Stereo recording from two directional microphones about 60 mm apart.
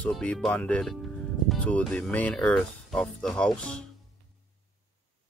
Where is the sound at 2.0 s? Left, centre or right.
Left.